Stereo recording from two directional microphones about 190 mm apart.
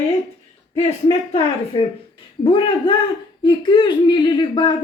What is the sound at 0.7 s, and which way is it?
Speech, 35° left (ahead or behind).